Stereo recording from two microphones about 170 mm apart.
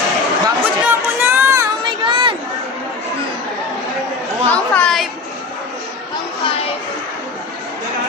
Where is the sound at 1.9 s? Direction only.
30° right (ahead or behind).